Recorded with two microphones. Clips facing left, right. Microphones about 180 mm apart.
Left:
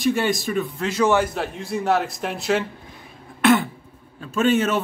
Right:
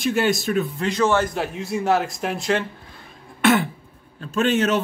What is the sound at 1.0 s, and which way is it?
Speech, 10° left (ahead or behind).